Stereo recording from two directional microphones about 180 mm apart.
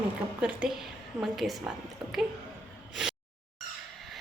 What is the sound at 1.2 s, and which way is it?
Speech, centre (ahead or behind).